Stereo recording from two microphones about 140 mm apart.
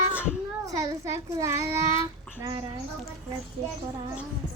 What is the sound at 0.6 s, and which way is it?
A child's voice, 20° right (ahead or behind).